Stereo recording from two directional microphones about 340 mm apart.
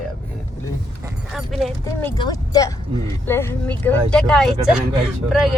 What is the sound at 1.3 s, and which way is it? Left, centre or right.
Speech, centre.